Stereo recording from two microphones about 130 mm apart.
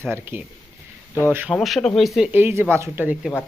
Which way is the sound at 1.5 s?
Centre (ahead or behind).